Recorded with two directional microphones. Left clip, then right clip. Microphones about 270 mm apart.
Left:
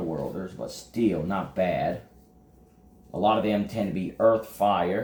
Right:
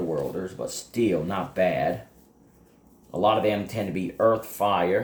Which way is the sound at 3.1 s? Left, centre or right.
Right.